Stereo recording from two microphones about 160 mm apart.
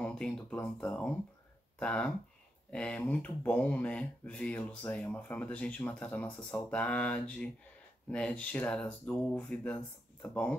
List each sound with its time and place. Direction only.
0.0 s speech: 5° left (ahead or behind)